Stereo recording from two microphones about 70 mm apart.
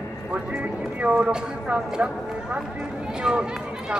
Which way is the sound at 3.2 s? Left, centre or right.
Centre.